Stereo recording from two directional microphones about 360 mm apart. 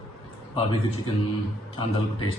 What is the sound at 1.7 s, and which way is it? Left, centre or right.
Speech, centre.